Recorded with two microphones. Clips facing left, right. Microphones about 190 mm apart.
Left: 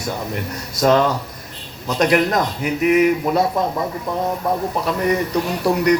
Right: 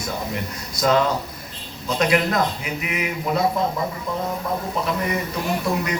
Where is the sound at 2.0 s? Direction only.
40° left (ahead or behind).